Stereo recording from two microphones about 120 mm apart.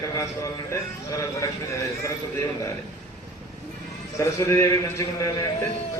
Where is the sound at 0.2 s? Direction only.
25° left (ahead or behind).